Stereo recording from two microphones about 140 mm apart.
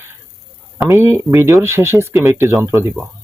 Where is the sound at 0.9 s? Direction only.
20° right (ahead or behind).